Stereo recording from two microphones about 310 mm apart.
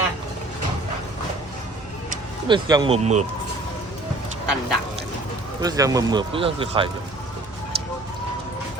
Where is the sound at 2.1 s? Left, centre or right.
Centre.